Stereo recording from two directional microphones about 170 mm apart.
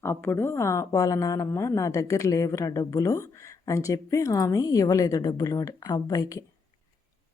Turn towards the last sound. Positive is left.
turn(degrees=20)  # may be behind; listen again after turning